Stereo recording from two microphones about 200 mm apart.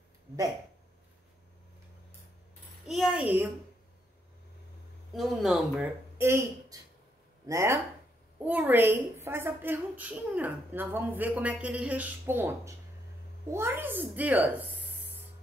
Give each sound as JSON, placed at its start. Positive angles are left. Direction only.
{"t": 2.9, "sound": "a child's voice", "side_deg": -5}
{"t": 5.1, "sound": "a woman's voice", "side_deg": 0}